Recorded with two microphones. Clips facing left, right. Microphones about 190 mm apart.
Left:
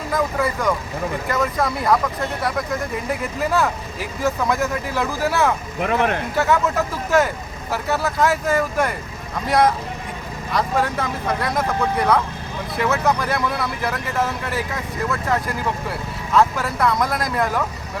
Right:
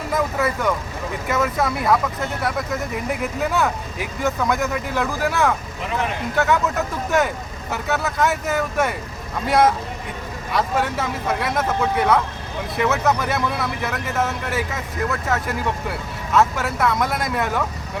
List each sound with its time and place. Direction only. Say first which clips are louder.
0.1 s speech: even; 5° right (ahead or behind)
3.1 s speech: left 1 dB; centre (ahead or behind)
5.8 s speech: left 6 dB; 60° left (ahead or behind)
6.3 s speech: right 1 dB; centre (ahead or behind)
7.7 s speech: left 2 dB; centre (ahead or behind)